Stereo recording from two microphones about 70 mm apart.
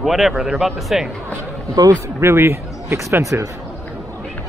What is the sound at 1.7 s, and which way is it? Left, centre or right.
Speech, right.